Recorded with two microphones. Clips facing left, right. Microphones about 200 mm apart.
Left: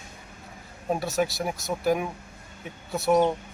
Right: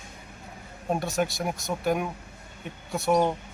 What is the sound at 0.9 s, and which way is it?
A man's voice, centre (ahead or behind).